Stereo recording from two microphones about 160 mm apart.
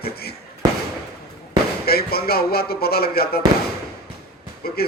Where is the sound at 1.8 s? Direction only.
75° left (ahead or behind).